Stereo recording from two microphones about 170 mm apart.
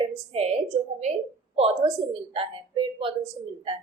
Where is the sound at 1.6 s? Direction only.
35° right (ahead or behind).